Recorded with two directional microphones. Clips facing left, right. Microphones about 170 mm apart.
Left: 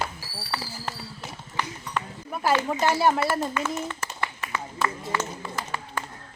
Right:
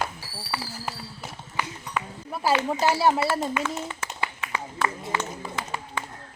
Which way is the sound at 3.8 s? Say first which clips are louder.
Even; 15° right (ahead or behind).